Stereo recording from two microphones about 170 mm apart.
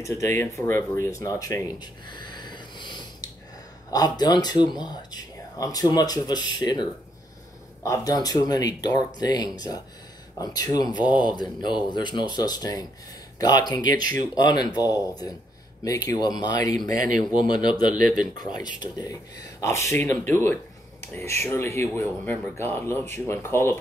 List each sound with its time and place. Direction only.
0.0 s speech: 15° left (ahead or behind)
1.8 s a sound: 25° left (ahead or behind)
3.9 s speech: 25° left (ahead or behind)